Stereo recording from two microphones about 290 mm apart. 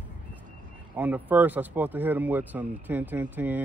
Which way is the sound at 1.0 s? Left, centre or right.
Centre.